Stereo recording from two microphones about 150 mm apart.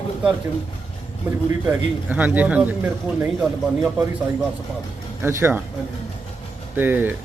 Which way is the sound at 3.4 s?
Centre (ahead or behind).